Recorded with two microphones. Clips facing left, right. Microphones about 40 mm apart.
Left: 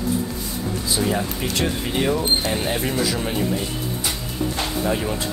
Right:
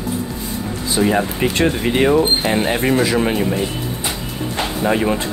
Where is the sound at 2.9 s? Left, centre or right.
Right.